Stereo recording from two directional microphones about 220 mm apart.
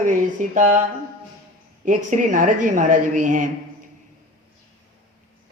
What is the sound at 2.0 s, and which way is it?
Mantra, 35° right (ahead or behind).